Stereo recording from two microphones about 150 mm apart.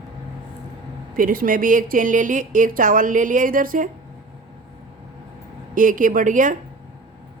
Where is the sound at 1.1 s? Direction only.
65° right (ahead or behind).